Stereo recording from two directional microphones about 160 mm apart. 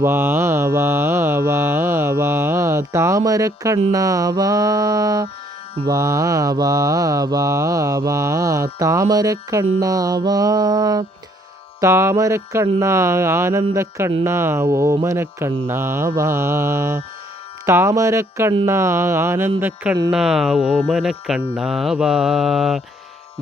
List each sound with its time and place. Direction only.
0.0 s mantra: 15° right (ahead or behind)
20.1 s speech: 5° right (ahead or behind)